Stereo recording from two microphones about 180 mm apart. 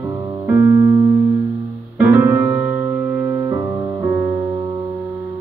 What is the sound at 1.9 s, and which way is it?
Music, 10° right (ahead or behind).